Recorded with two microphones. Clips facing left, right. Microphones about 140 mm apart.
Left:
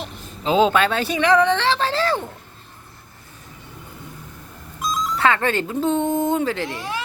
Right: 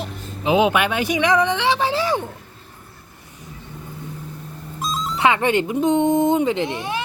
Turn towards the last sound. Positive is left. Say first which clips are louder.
# right 3 dB
turn(degrees=-25)  # may be behind; listen again after turning